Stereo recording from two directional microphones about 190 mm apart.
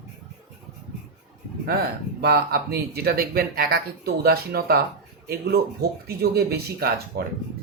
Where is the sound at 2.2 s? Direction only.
55° right (ahead or behind).